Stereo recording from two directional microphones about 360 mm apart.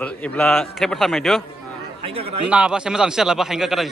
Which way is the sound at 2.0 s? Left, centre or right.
Centre.